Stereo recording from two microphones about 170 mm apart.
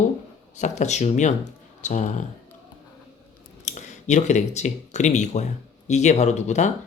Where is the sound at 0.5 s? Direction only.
45° left (ahead or behind).